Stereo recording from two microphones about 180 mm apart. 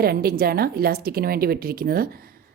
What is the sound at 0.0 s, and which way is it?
Speech, 60° right (ahead or behind).